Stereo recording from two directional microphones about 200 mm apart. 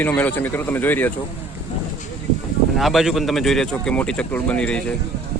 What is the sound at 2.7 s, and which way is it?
Speech, centre (ahead or behind).